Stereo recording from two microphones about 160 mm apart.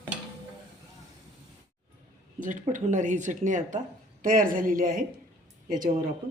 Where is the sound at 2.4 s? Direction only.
55° right (ahead or behind).